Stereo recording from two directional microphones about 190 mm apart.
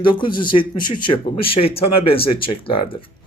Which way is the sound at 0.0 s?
25° left (ahead or behind).